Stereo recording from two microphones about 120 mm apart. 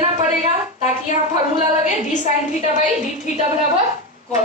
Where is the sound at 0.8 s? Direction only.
85° left.